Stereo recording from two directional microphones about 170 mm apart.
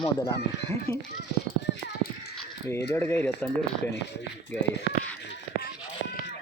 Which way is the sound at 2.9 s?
15° left (ahead or behind).